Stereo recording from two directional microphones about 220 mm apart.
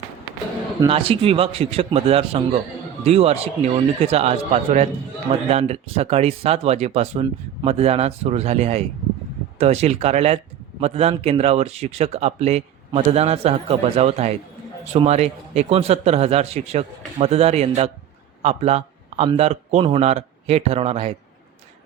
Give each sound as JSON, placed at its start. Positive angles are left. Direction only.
{"t": 0.8, "sound": "a man's voice", "side_deg": -25}